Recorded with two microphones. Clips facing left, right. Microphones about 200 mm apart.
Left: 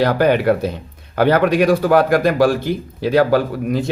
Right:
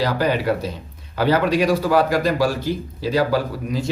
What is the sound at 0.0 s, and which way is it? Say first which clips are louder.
A man's voice: left 6 dB; 60° left (ahead or behind).